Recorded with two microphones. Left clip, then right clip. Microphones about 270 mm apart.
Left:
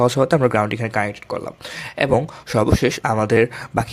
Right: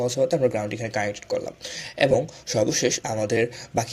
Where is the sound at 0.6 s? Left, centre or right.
Left.